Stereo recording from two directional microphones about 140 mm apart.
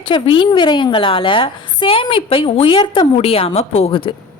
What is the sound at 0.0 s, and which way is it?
A woman's voice, 35° left (ahead or behind).